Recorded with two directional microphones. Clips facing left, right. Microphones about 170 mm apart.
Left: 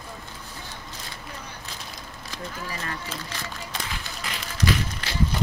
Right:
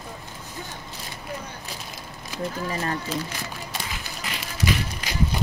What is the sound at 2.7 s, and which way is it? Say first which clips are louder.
Speech: right 7 dB; 35° right (ahead or behind).